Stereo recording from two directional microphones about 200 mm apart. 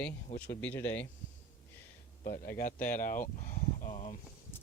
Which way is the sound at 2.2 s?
45° left (ahead or behind).